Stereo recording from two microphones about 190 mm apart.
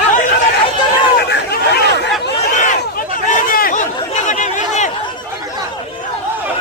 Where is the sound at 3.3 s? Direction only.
45° left (ahead or behind).